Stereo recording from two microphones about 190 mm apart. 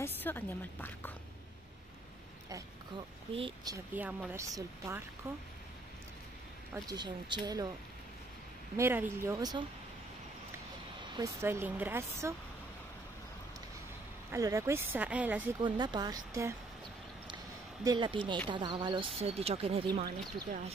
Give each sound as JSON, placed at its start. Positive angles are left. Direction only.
{"t": 0.0, "sound": "speech", "side_deg": 10}
{"t": 3.3, "sound": "speech", "side_deg": -25}
{"t": 3.7, "sound": "speech", "side_deg": -10}
{"t": 6.7, "sound": "speech", "side_deg": -20}
{"t": 8.7, "sound": "speech", "side_deg": -10}
{"t": 11.1, "sound": "speech", "side_deg": -15}
{"t": 14.3, "sound": "speech", "side_deg": -15}
{"t": 15.6, "sound": "speech", "side_deg": -25}
{"t": 17.8, "sound": "speech", "side_deg": -25}